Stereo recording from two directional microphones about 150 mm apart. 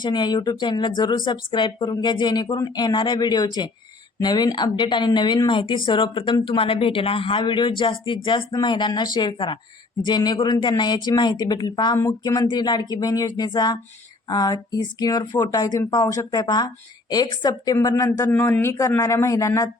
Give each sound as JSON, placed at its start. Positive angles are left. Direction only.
{"t": 0.0, "sound": "speech", "side_deg": 30}